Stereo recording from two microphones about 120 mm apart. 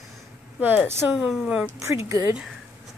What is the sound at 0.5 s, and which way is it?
Speech, 15° right (ahead or behind).